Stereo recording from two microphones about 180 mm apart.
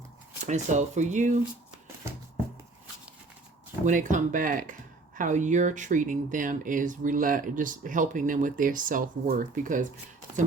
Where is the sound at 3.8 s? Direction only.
45° right (ahead or behind).